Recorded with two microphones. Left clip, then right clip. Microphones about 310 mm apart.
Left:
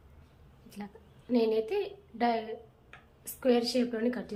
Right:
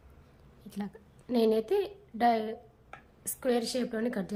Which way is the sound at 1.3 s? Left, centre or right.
Right.